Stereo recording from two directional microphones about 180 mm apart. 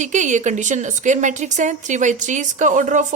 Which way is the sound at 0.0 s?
40° right (ahead or behind).